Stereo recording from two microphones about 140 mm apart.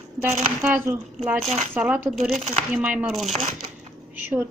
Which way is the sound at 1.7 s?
10° right (ahead or behind).